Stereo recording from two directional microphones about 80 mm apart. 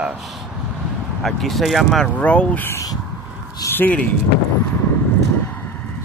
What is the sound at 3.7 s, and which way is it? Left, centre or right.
Speech, left.